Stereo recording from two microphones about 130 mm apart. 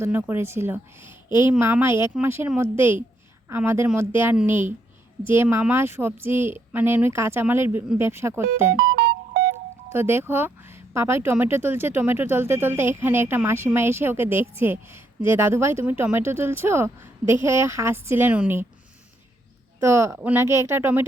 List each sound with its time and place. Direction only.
0.0 s speech: 15° right (ahead or behind)
9.9 s speech: 20° right (ahead or behind)
19.8 s speech: 20° right (ahead or behind)